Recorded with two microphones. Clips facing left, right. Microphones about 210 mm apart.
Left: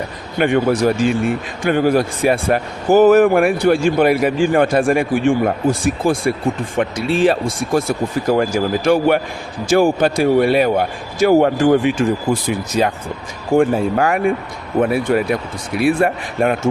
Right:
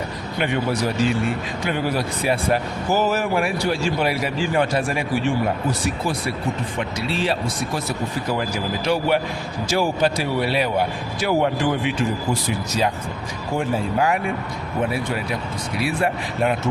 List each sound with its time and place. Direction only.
0.3 s speech: 50° left (ahead or behind)